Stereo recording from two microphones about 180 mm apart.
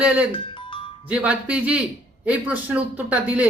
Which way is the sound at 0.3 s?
30° left (ahead or behind).